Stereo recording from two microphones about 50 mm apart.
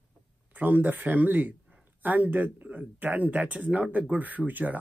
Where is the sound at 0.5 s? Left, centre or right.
Right.